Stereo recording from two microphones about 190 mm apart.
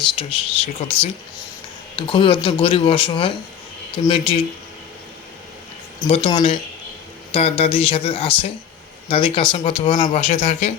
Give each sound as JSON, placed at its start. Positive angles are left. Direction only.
{"t": 0.0, "sound": "speech", "side_deg": 25}
{"t": 2.0, "sound": "speech", "side_deg": 30}
{"t": 6.1, "sound": "speech", "side_deg": 30}